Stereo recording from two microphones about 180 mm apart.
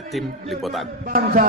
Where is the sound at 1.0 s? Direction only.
50° right (ahead or behind).